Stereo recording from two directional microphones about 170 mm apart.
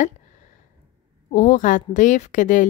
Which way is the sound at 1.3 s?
45° left (ahead or behind).